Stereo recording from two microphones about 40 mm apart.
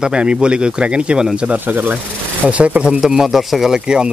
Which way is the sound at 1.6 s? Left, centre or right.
Right.